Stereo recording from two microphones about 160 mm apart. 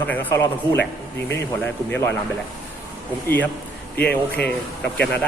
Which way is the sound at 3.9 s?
10° left (ahead or behind).